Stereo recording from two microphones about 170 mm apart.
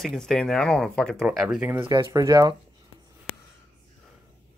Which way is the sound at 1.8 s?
20° right (ahead or behind).